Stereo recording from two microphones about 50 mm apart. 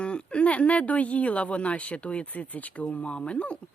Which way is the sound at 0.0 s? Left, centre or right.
Left.